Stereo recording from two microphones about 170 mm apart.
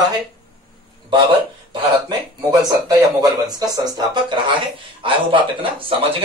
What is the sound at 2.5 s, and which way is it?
A man's voice, 20° right (ahead or behind).